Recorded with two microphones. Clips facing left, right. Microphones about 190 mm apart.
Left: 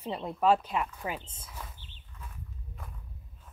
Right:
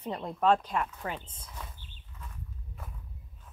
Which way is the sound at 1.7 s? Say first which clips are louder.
Even; 50° right (ahead or behind).